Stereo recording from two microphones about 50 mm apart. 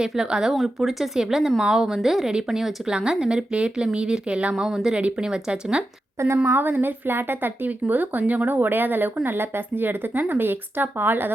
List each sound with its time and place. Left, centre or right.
0.0 s speech: centre
4.5 s speech: centre
4.9 s speech: right
6.3 s speech: right
7.7 s speech: right